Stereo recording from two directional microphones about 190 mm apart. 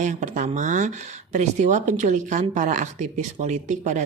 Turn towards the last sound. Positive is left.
turn(degrees=-40)  # may be behind; listen again after turning